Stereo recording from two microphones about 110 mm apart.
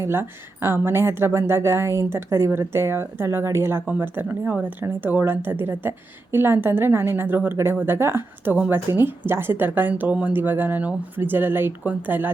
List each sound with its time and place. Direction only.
0.0 s a woman's voice: 20° right (ahead or behind)